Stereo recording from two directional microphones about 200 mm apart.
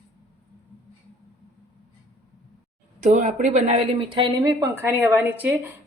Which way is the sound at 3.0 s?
40° right (ahead or behind).